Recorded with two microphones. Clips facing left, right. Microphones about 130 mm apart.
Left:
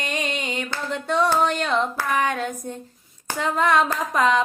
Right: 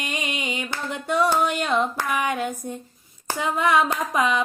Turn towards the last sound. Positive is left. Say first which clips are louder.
# left 2 dB
turn(degrees=-10)  # may be behind; listen again after turning